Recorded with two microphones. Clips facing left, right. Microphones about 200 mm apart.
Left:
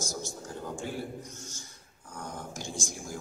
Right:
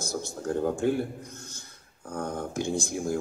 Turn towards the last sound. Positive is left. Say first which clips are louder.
# right 10 dB
turn(degrees=-60)  # may be behind; listen again after turning